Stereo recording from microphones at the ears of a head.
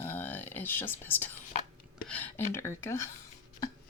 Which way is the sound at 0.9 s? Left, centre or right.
Left.